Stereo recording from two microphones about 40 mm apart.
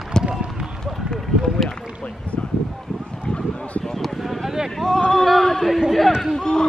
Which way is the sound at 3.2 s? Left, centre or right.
Left.